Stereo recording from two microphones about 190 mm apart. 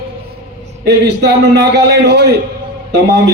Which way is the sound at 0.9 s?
60° right (ahead or behind).